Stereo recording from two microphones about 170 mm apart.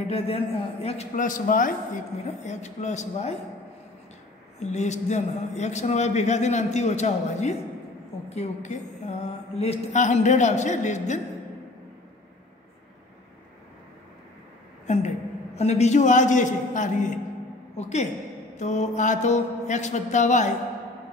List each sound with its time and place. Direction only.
0.1 s a man's voice: 35° left (ahead or behind)
1.1 s a man's voice: 50° left (ahead or behind)
4.6 s a man's voice: 40° left (ahead or behind)
14.9 s a man's voice: 40° left (ahead or behind)